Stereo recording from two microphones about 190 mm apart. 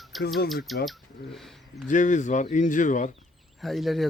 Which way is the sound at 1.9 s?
40° left (ahead or behind).